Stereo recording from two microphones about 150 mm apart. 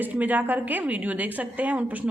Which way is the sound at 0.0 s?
10° right (ahead or behind).